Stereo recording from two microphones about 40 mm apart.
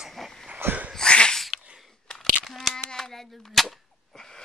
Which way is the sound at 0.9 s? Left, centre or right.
Left.